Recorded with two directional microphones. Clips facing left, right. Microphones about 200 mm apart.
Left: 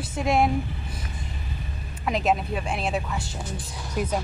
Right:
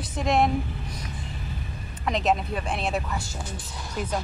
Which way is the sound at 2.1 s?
5° left (ahead or behind).